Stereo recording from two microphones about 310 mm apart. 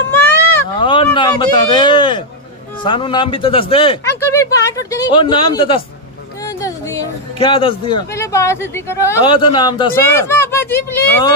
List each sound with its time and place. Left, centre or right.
0.7 s a man's voice: centre